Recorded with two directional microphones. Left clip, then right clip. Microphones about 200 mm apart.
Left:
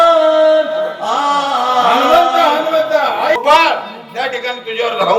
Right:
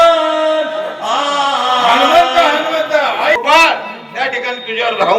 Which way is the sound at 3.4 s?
50° left (ahead or behind).